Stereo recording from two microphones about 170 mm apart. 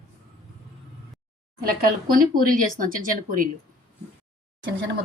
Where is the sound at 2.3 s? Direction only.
55° right (ahead or behind).